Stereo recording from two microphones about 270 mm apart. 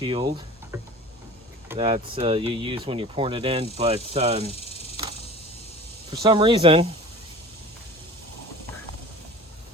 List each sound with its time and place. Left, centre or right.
0.0 s speech: centre
4.4 s cricket: left
6.2 s speech: centre